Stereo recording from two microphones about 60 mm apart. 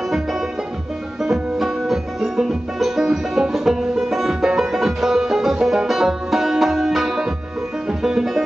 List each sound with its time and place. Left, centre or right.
1.2 s music: centre